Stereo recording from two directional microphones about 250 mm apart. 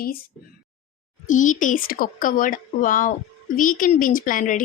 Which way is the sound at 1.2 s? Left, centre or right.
Left.